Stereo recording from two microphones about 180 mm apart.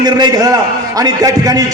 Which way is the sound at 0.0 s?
20° right (ahead or behind).